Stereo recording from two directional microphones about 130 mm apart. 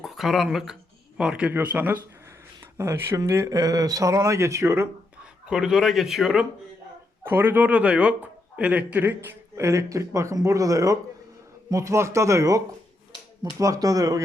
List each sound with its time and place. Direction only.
0.0 s speech: centre (ahead or behind); by 4.9 s 20° right (ahead or behind)
5.2 s speech: 5° right (ahead or behind)
7.3 s speech: 15° right (ahead or behind)